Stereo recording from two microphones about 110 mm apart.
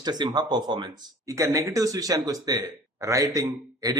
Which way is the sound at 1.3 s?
30° right (ahead or behind).